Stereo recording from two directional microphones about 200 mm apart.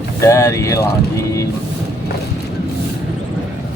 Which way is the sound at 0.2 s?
15° left (ahead or behind).